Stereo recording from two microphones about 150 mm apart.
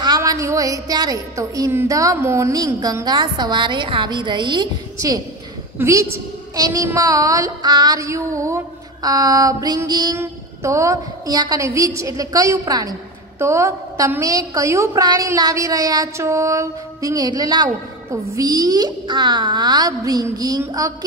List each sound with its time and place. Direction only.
0.0 s a woman's voice: 25° right (ahead or behind)